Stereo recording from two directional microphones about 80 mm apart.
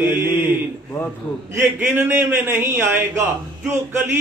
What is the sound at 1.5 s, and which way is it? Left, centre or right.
A man's voice, right.